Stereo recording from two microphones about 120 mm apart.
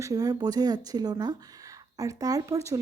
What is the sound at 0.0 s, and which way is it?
A woman's voice, 30° right (ahead or behind).